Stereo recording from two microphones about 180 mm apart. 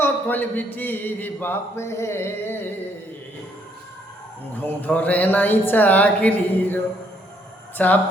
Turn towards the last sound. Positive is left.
turn(degrees=10)  # may be behind; listen again after turning